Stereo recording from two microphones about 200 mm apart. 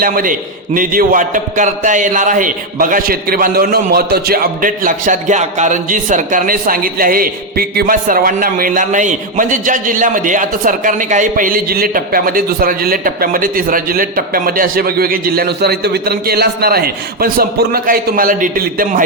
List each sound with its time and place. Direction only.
0.0 s a man's voice: 45° right (ahead or behind)